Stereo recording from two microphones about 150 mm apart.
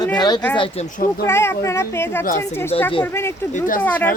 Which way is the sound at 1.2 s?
15° left (ahead or behind).